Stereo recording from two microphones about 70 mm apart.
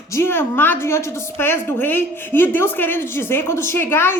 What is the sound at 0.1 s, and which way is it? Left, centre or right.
A woman's voice, left.